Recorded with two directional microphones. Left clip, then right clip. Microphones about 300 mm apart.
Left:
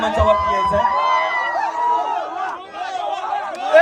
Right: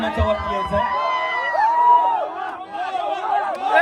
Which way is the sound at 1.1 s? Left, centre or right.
Left.